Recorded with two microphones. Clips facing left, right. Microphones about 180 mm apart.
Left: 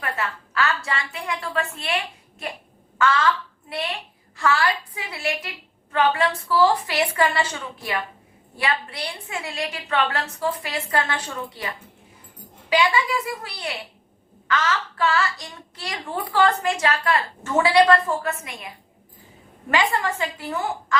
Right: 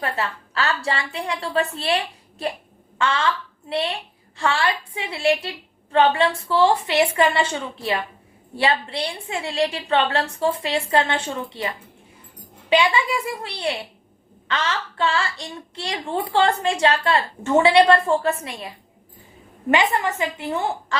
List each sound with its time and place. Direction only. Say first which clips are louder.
0.0 s a woman's voice: right 2 dB; 30° right (ahead or behind)
12.7 s a woman's voice: right 2 dB; 25° right (ahead or behind)
19.7 s a woman's voice: right 2 dB; 20° right (ahead or behind)